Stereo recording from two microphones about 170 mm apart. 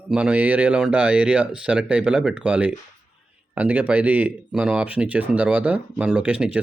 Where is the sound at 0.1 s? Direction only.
5° right (ahead or behind).